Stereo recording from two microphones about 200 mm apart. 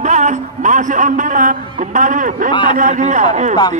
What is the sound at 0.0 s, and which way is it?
A man's voice, 35° right (ahead or behind).